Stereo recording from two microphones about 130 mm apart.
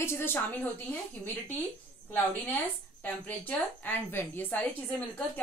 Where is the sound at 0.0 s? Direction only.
20° left (ahead or behind).